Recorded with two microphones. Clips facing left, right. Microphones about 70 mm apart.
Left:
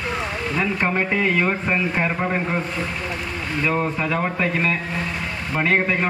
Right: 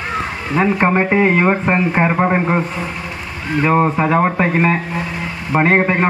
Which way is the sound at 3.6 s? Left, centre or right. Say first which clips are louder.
Right 8 dB; right.